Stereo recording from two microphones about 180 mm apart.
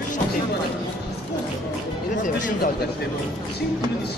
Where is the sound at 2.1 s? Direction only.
45° left (ahead or behind).